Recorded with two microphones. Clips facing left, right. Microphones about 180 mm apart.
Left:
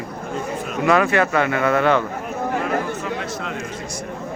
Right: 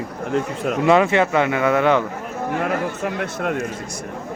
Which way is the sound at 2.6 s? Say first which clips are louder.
Right 1 dB; 55° right (ahead or behind).